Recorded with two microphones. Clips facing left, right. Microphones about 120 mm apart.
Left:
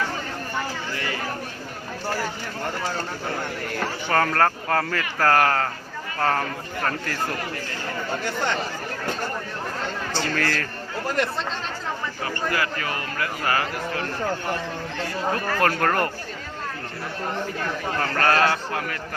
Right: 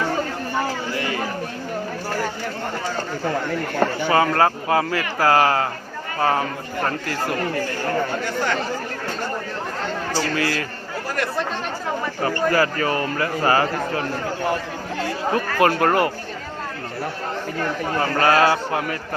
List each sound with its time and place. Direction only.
4.1 s speech: 10° right (ahead or behind)
10.2 s speech: 5° right (ahead or behind)
12.2 s a man's voice: 35° right (ahead or behind)
15.3 s speech: 10° right (ahead or behind)
18.0 s speech: 15° right (ahead or behind)